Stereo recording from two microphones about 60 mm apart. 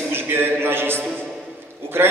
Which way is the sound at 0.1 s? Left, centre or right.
Right.